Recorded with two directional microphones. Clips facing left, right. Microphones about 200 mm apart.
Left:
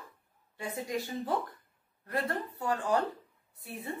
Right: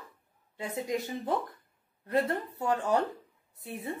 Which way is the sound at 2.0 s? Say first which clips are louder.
Right 5 dB; 25° right (ahead or behind).